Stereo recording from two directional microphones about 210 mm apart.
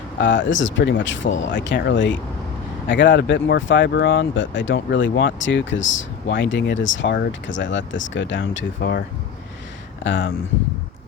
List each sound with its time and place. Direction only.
0.2 s speech: 60° left (ahead or behind)
10.0 s speech: 65° left (ahead or behind)